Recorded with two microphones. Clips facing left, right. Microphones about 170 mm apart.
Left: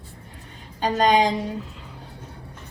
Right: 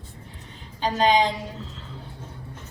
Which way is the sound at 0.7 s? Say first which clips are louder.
Left 1 dB; 45° left (ahead or behind).